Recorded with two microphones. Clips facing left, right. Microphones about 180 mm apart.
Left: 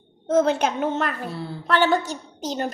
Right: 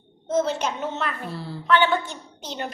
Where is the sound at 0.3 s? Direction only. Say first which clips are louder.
Left 4 dB; 60° left (ahead or behind).